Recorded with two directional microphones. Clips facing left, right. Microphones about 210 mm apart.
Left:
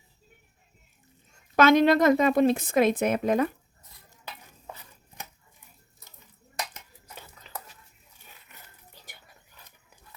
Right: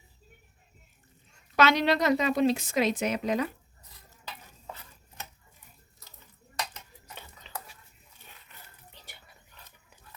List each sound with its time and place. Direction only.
1.5 s a woman's voice: 50° left (ahead or behind)